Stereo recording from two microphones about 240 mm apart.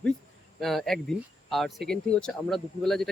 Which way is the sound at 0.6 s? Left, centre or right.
Centre.